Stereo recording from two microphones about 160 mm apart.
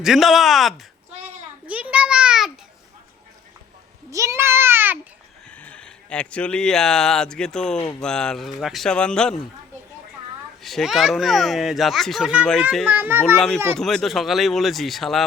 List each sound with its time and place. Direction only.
0.0 s a child's voice: centre (ahead or behind)
1.6 s a sound: 10° right (ahead or behind)
4.1 s a child's voice: 20° right (ahead or behind)
5.5 s a child's voice: 5° left (ahead or behind)
10.6 s a child's voice: centre (ahead or behind)
13.3 s a child's voice: 5° left (ahead or behind)